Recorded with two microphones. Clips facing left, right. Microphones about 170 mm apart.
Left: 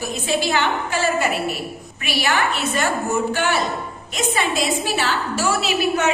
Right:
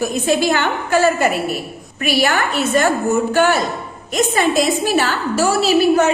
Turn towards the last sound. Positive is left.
turn(degrees=-35)  # may be behind; listen again after turning